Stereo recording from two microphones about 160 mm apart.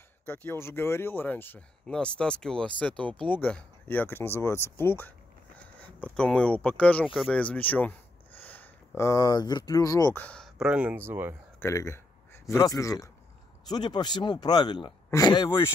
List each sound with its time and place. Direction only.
0.2 s speech: 10° left (ahead or behind)
10.1 s speech: 5° left (ahead or behind); by 11.3 s 15° right (ahead or behind)
11.6 s speech: 20° left (ahead or behind)